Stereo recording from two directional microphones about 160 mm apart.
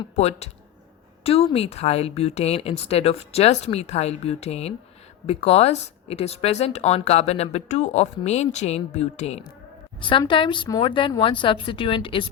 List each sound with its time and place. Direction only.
0.2 s speech: 40° left (ahead or behind)
10.0 s speech: 30° left (ahead or behind)